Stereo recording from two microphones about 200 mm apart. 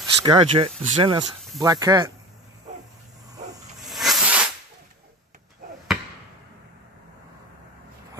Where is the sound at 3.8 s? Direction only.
Centre (ahead or behind).